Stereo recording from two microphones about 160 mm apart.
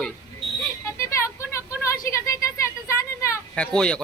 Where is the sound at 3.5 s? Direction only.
5° left (ahead or behind).